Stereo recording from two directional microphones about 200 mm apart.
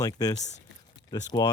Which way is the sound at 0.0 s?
20° left (ahead or behind).